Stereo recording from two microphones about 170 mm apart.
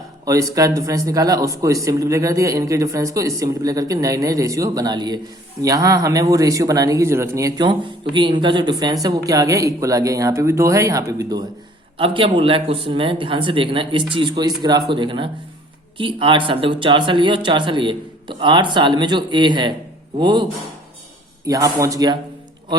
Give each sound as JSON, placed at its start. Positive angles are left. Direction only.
{"t": 0.3, "sound": "speech", "side_deg": -20}
{"t": 11.9, "sound": "speech", "side_deg": -30}